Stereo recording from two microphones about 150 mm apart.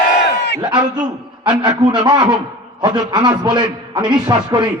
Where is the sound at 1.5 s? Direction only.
30° right (ahead or behind).